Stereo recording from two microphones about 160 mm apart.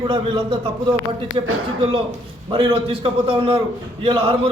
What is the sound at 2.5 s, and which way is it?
A man's voice, 30° right (ahead or behind).